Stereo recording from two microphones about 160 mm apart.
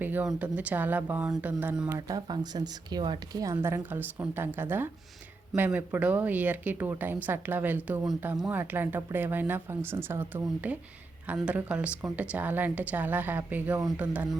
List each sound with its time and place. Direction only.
0.0 s speech: 10° right (ahead or behind)
1.9 s a woman's voice: 20° right (ahead or behind)